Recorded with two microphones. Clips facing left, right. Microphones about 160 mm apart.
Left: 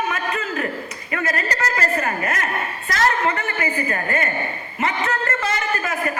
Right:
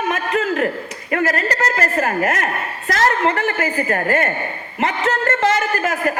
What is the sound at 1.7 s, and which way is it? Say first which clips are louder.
A woman's voice: right 3 dB; 65° right (ahead or behind).